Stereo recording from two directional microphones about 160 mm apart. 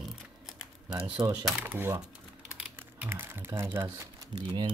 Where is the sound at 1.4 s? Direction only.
10° right (ahead or behind).